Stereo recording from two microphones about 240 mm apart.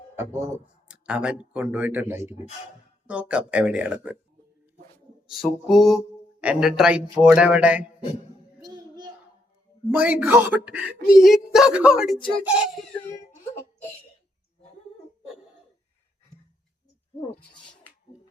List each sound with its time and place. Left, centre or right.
0.2 s speech: centre
2.2 s speech: left
3.1 s speech: centre
5.6 s speech: centre
8.6 s child singing: centre
9.9 s speech: centre